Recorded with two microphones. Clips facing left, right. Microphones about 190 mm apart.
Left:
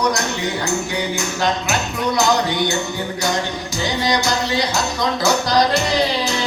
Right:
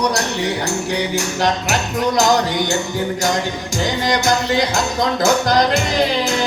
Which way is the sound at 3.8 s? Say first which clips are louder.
Right 1 dB; 50° right (ahead or behind).